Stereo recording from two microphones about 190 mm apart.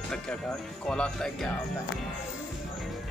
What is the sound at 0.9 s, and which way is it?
Speech, 5° left (ahead or behind).